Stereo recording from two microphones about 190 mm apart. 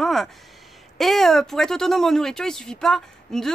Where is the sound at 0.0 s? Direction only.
Centre (ahead or behind).